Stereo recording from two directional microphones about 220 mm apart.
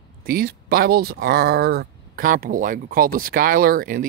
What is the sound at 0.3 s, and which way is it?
Speech, 45° right (ahead or behind).